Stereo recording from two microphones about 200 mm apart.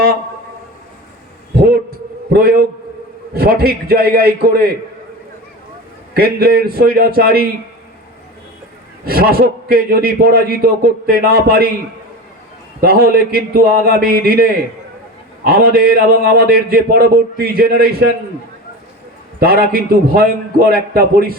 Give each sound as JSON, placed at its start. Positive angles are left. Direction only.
{"t": 2.3, "sound": "a man's voice", "side_deg": -50}
{"t": 6.1, "sound": "a man's voice", "side_deg": -50}
{"t": 9.0, "sound": "a man's voice", "side_deg": -50}
{"t": 12.8, "sound": "a man's voice", "side_deg": -45}
{"t": 19.4, "sound": "a man's voice", "side_deg": -50}